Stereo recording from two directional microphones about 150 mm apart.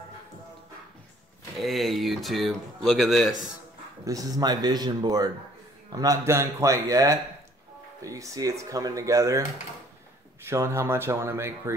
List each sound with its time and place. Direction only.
1.6 s speech: centre (ahead or behind)
4.0 s speech: 25° right (ahead or behind)
10.4 s speech: 20° right (ahead or behind)